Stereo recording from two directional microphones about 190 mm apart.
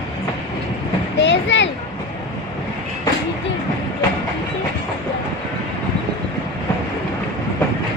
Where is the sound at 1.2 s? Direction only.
70° left (ahead or behind).